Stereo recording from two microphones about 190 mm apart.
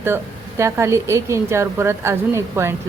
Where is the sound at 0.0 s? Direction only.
15° right (ahead or behind).